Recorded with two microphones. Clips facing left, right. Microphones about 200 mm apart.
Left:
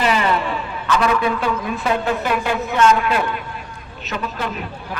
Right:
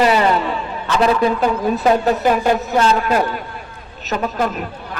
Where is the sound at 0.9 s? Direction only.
30° right (ahead or behind).